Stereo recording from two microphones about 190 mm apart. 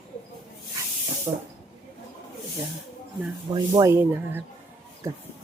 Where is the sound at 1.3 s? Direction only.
25° right (ahead or behind).